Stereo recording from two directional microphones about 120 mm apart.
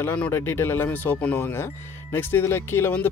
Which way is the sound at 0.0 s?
15° left (ahead or behind).